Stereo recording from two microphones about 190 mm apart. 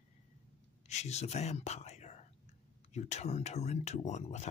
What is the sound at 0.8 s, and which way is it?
Speech, 35° left (ahead or behind).